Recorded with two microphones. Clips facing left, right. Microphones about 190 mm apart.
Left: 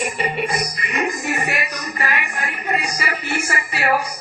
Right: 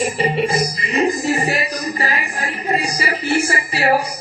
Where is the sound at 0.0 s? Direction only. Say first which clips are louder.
Right 5 dB; 30° right (ahead or behind).